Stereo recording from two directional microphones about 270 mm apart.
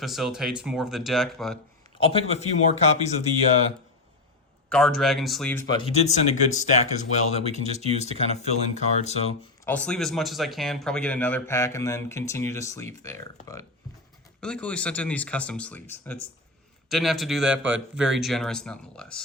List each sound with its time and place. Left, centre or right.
0.0 s a man's voice: centre
2.0 s speech: left
4.7 s speech: centre; by 7.4 s left
7.4 s speech: right
8.2 s speech: left
9.6 s a man's voice: centre